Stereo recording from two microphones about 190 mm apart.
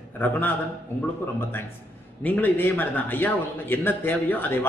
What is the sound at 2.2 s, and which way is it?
A man's voice, 10° left (ahead or behind).